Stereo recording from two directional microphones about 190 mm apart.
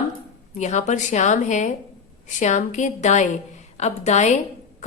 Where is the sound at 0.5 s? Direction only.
40° left (ahead or behind).